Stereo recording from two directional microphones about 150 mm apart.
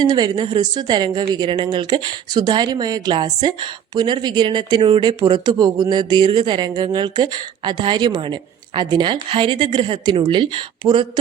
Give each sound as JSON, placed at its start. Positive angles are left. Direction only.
{"t": 0.0, "sound": "a woman's voice", "side_deg": -30}